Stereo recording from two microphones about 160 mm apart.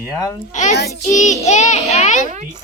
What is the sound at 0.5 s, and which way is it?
A child's voice, 50° left (ahead or behind).